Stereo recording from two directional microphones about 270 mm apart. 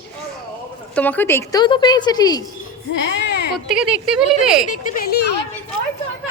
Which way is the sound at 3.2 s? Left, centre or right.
Left.